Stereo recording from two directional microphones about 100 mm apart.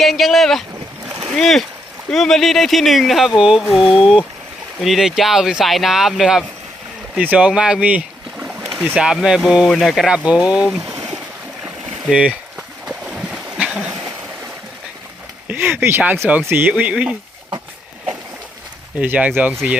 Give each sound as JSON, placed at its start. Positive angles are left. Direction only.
{"t": 0.0, "sound": "speech", "side_deg": 0}
{"t": 7.2, "sound": "speech", "side_deg": -15}
{"t": 9.0, "sound": "speech", "side_deg": -5}
{"t": 12.5, "sound": "a sound", "side_deg": -5}
{"t": 15.4, "sound": "a sound", "side_deg": -20}
{"t": 16.5, "sound": "speech", "side_deg": -20}
{"t": 18.9, "sound": "speech", "side_deg": -15}